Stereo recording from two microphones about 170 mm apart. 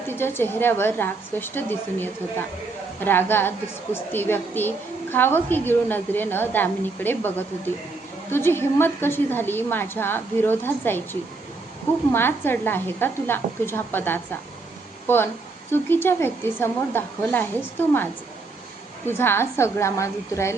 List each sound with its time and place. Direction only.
0.1 s a woman's voice: 15° left (ahead or behind)